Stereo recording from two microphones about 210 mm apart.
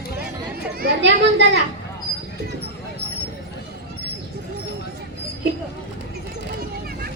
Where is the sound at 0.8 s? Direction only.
55° right (ahead or behind).